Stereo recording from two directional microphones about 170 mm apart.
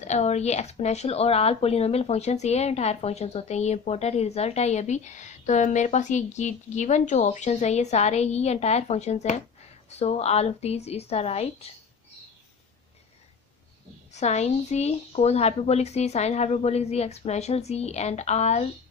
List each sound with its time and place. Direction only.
0.0 s speech: 40° left (ahead or behind)
14.1 s speech: 40° left (ahead or behind)